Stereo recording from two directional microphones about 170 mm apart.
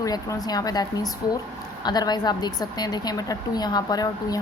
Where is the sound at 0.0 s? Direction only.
20° left (ahead or behind).